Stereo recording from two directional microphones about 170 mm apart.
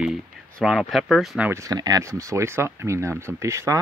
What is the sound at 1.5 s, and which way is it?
Speech, 20° right (ahead or behind).